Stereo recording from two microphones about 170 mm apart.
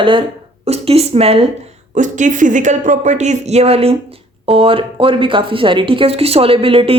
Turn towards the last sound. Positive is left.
turn(degrees=-35)  # may be behind; listen again after turning